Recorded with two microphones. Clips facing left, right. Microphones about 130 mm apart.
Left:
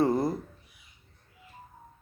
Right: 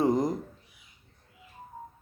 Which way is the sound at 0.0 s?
15° right (ahead or behind).